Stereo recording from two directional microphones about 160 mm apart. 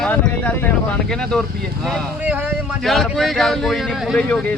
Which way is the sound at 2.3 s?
10° right (ahead or behind).